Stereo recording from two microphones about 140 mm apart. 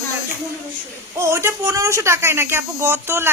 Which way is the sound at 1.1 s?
20° right (ahead or behind).